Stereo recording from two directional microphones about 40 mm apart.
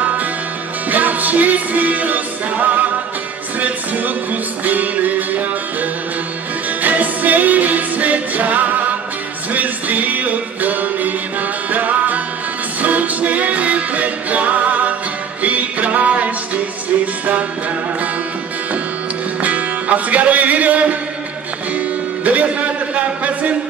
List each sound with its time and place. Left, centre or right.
0.8 s music: right
19.4 s music: right
22.9 s a sound: right